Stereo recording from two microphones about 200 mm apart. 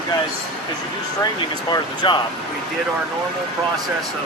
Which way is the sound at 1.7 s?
20° left (ahead or behind).